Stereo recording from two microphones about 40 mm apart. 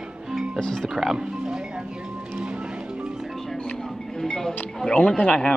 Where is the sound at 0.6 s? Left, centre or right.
Centre.